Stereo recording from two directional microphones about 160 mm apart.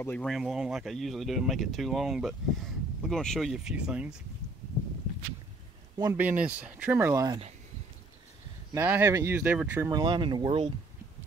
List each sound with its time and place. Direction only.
0.0 s speech: 5° left (ahead or behind)
6.1 s speech: 10° right (ahead or behind)
7.2 s speech: 35° right (ahead or behind)
8.7 s speech: 15° right (ahead or behind)
9.8 s speech: 25° right (ahead or behind)